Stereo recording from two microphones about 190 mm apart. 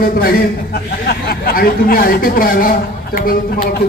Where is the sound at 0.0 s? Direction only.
50° left (ahead or behind).